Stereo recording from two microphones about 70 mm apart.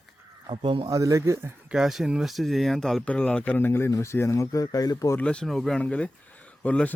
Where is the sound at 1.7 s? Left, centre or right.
Centre.